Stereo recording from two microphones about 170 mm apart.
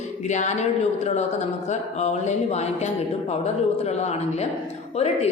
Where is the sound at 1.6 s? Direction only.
40° left (ahead or behind).